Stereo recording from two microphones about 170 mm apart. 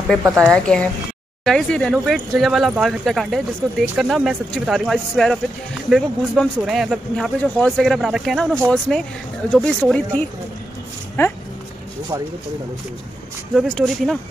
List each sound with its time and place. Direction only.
0.2 s a woman's voice: 15° right (ahead or behind)
0.5 s speech: 5° left (ahead or behind)
13.6 s speech: 5° left (ahead or behind)